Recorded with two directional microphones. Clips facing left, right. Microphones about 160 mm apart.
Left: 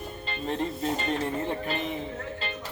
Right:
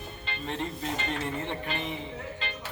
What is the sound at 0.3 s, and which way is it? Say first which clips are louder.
Speech: left 4 dB; 40° left (ahead or behind).